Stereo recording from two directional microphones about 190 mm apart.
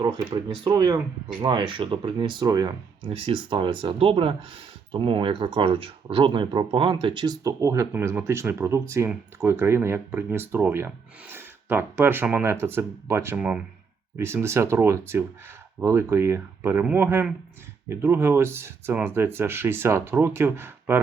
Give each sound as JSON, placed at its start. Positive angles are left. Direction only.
{"t": 0.0, "sound": "speech", "side_deg": -25}